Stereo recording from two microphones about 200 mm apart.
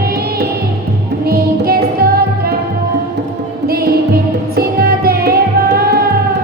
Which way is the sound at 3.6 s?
50° right (ahead or behind).